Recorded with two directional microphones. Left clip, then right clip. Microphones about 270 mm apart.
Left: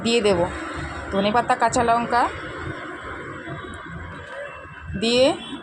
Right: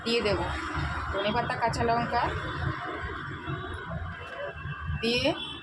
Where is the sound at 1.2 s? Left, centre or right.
Left.